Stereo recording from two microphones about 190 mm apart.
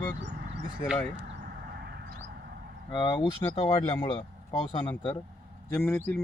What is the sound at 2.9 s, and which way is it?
Speech, 25° left (ahead or behind).